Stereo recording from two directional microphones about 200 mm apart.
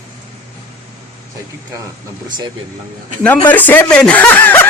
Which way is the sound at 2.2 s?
20° right (ahead or behind).